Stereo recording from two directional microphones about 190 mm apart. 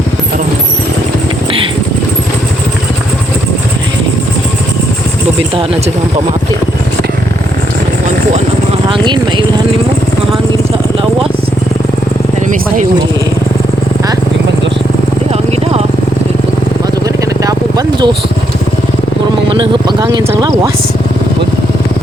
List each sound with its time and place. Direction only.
17.4 s vehicle: 20° right (ahead or behind)
19.5 s speech: 25° right (ahead or behind)